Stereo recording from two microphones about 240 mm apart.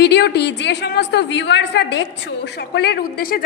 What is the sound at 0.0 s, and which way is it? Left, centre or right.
A woman's voice, left.